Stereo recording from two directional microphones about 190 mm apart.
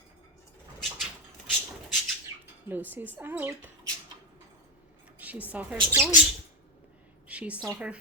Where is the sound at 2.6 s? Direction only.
10° right (ahead or behind).